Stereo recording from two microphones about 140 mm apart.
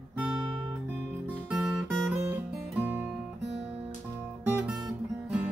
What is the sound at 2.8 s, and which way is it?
Music, 15° right (ahead or behind).